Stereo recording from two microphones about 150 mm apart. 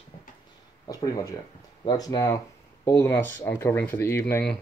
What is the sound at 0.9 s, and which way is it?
Speech, 25° left (ahead or behind).